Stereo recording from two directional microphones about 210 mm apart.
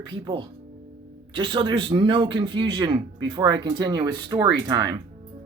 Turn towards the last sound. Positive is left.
turn(degrees=-20)  # may be behind; listen again after turning